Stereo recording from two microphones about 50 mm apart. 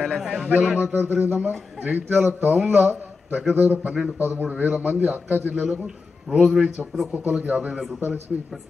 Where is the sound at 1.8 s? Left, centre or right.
Right.